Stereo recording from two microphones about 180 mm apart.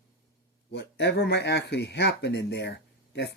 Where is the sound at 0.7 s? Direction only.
70° left (ahead or behind).